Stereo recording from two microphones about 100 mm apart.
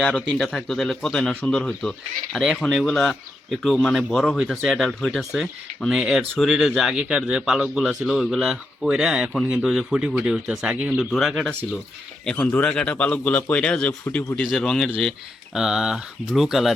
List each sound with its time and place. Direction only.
0.0 s a man's voice: 5° left (ahead or behind)